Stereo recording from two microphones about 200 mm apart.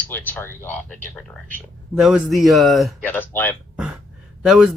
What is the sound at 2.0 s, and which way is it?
Speech, 5° right (ahead or behind).